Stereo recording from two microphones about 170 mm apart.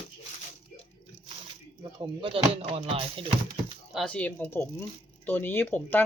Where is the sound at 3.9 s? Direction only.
5° left (ahead or behind).